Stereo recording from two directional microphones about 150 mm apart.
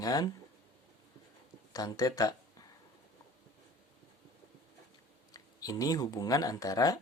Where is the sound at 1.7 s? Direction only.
25° left (ahead or behind).